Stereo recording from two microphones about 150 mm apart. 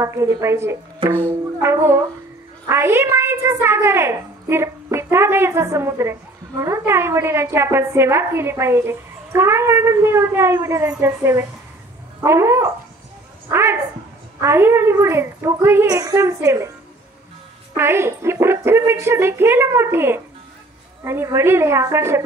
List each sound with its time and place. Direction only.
0.0 s a woman's voice: 20° right (ahead or behind)
17.7 s a woman's voice: 15° right (ahead or behind)